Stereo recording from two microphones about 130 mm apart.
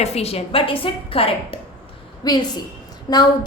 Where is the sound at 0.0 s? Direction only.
55° left (ahead or behind).